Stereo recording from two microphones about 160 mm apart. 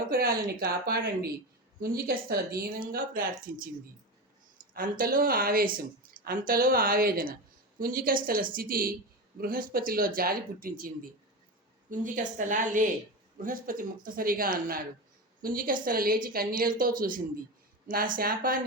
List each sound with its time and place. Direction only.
0.1 s a woman's voice: 70° right (ahead or behind)
4.7 s a woman's voice: 65° right (ahead or behind)